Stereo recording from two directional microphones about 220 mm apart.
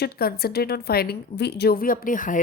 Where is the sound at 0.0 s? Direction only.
45° left (ahead or behind).